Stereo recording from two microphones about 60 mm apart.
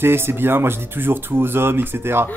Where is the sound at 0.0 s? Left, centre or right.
Right.